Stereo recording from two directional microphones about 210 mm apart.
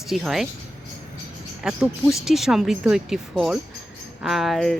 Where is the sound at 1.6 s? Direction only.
5° right (ahead or behind).